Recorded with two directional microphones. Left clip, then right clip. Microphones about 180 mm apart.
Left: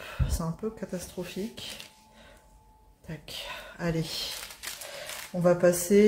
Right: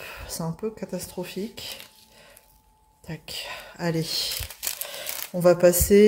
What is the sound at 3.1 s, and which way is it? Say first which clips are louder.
Speech: right 4 dB; 35° right (ahead or behind).